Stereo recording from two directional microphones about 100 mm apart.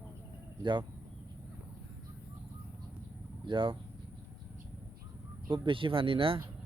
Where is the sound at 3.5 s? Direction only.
55° right (ahead or behind).